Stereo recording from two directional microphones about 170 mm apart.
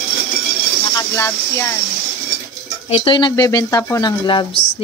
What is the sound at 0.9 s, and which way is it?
Speech, 15° left (ahead or behind).